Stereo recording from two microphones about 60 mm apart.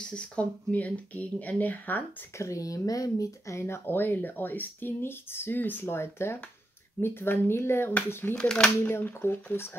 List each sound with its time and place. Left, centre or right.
0.0 s speech: centre
2.3 s speech: left
3.6 s speech: left
8.4 s speech: centre
9.0 s speech: left